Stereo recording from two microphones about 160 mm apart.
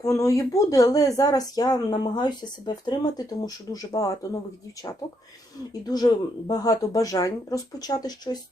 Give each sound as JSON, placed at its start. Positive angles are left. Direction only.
{"t": 0.0, "sound": "a woman's voice", "side_deg": 20}
{"t": 5.8, "sound": "a woman's voice", "side_deg": 25}